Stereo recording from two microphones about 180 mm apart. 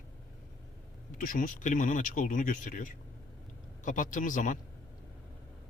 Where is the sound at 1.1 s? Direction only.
50° left (ahead or behind).